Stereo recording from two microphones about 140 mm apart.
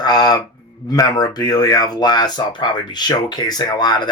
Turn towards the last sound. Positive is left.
turn(degrees=30)  # may be behind; listen again after turning